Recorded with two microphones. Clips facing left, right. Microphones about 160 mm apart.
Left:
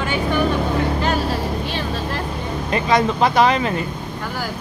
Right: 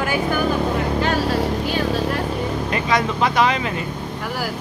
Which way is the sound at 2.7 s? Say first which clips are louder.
Left 5 dB; 30° left (ahead or behind).